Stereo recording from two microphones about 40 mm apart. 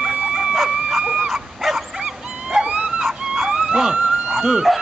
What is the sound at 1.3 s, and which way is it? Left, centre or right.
Dog, centre.